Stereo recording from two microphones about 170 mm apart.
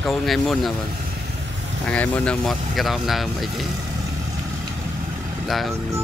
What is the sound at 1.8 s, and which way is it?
Speech, 5° left (ahead or behind).